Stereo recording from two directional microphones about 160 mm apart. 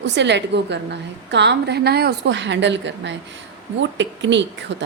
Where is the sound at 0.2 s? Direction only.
90° right.